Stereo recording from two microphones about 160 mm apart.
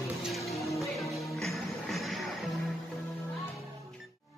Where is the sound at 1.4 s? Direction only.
Centre (ahead or behind).